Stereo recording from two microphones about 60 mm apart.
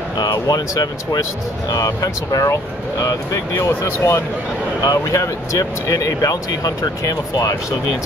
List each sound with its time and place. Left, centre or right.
0.2 s speech: left